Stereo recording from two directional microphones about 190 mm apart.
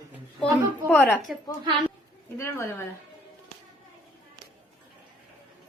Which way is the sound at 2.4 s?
10° left (ahead or behind).